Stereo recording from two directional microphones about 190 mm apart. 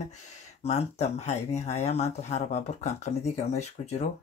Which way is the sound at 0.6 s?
35° left (ahead or behind).